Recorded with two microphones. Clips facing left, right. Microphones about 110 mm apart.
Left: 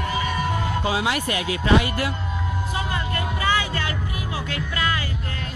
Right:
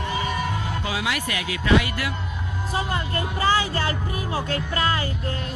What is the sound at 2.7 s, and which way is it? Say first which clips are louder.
Speech: right 4 dB; 30° right (ahead or behind).